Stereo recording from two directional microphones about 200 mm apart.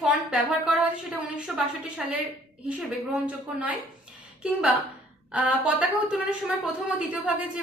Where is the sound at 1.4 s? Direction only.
5° right (ahead or behind).